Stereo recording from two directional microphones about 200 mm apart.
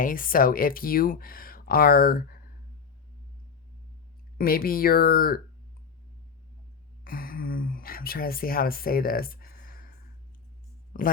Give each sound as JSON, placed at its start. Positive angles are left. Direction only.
{"t": 0.0, "sound": "speech", "side_deg": 45}
{"t": 4.4, "sound": "speech", "side_deg": 45}
{"t": 7.0, "sound": "a sound", "side_deg": 45}
{"t": 10.9, "sound": "speech", "side_deg": 45}